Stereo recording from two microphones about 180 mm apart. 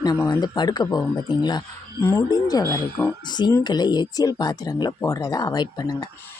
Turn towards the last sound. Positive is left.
turn(degrees=20)  # may be behind; listen again after turning